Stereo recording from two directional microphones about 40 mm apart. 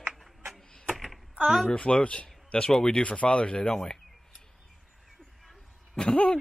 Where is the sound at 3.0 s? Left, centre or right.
Left.